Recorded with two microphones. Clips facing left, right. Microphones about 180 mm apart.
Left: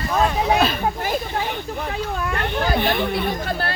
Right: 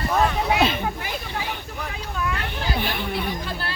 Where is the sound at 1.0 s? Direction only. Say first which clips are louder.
Left 6 dB; 50° left (ahead or behind).